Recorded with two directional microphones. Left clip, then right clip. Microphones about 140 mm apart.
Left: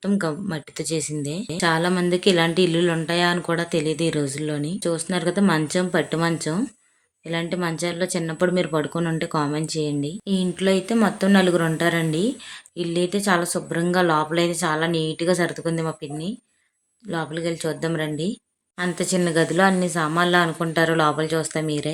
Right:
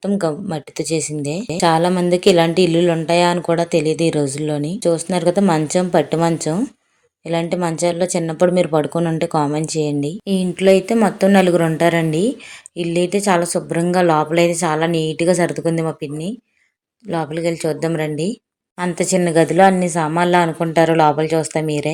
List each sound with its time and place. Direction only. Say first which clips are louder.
0.0 s a woman's voice: right 5 dB; 10° right (ahead or behind)
17.1 s a woman's voice: right 6 dB; 25° right (ahead or behind)